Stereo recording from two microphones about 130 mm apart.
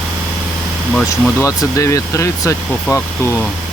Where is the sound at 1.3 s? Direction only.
25° left (ahead or behind).